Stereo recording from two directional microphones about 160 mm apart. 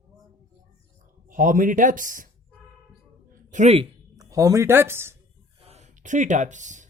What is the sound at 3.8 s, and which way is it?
Speech, 20° right (ahead or behind).